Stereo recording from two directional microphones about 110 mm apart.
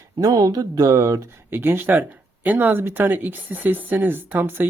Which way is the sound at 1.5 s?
20° right (ahead or behind).